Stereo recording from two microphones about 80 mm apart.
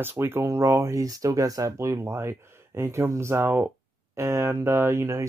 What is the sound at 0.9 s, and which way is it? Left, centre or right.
Speech, right.